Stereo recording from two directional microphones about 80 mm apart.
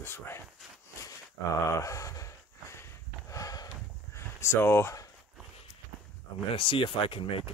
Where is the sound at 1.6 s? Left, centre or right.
Left.